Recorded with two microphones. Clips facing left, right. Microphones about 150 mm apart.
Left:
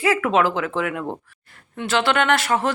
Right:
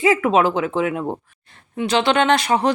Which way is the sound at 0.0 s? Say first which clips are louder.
Right 3 dB; 20° right (ahead or behind).